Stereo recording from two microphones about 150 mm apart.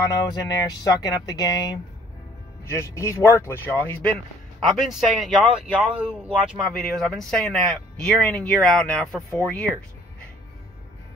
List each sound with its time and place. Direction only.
0.0 s speech: 25° left (ahead or behind)
4.6 s speech: centre (ahead or behind)
6.7 s speech: 5° left (ahead or behind)